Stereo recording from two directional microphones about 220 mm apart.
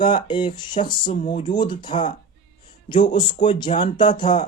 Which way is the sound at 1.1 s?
35° left (ahead or behind).